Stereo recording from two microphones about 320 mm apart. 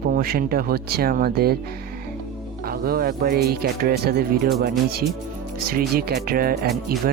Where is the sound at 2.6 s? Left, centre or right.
Right.